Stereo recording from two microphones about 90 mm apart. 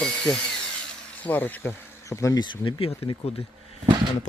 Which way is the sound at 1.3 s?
20° left (ahead or behind).